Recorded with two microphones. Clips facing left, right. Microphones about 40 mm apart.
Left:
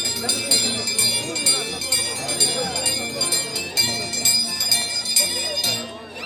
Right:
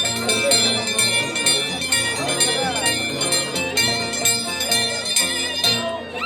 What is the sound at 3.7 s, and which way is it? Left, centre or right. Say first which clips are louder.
Music: right 2 dB; right.